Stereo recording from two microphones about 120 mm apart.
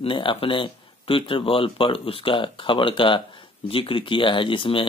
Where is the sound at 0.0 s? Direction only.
45° left (ahead or behind).